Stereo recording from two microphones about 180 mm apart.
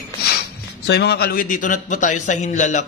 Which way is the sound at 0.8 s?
65° left (ahead or behind).